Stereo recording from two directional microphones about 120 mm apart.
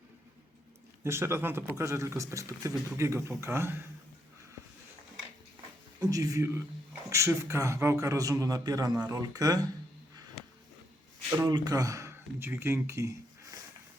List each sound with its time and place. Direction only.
1.0 s speech: 20° right (ahead or behind)
6.0 s speech: 30° right (ahead or behind)
11.3 s speech: 35° right (ahead or behind)